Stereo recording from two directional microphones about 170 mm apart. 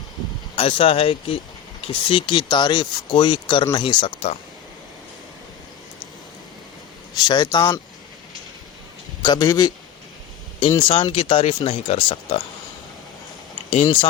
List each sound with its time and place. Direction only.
0.5 s speech: 35° left (ahead or behind)
7.2 s speech: 25° left (ahead or behind)
9.2 s speech: 25° left (ahead or behind)
10.8 s speech: 30° left (ahead or behind)
13.8 s speech: 30° left (ahead or behind)